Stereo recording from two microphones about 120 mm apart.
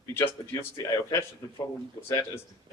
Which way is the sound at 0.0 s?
20° left (ahead or behind).